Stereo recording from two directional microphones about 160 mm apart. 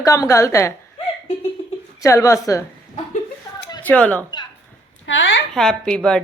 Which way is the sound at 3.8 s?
10° left (ahead or behind).